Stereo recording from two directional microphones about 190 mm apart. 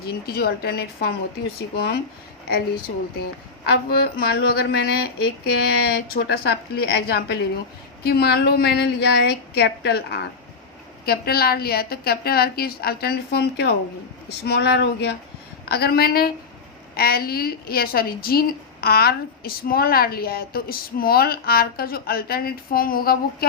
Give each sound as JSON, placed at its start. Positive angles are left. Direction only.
{"t": 0.3, "sound": "a woman's voice", "side_deg": 55}
{"t": 3.7, "sound": "a woman's voice", "side_deg": 55}